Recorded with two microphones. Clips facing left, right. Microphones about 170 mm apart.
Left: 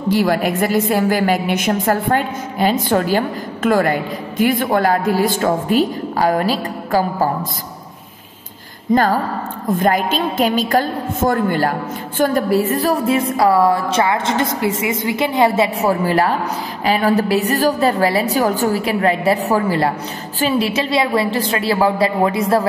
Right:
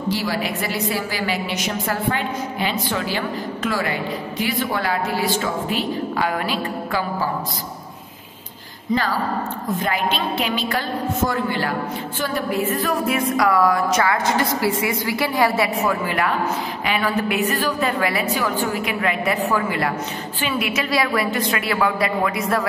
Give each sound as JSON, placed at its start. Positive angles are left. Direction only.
{"t": 0.1, "sound": "a woman's voice", "side_deg": 50}
{"t": 8.9, "sound": "a woman's voice", "side_deg": 50}
{"t": 12.2, "sound": "music", "side_deg": 40}
{"t": 16.8, "sound": "a woman's voice", "side_deg": 35}
{"t": 20.3, "sound": "music", "side_deg": 35}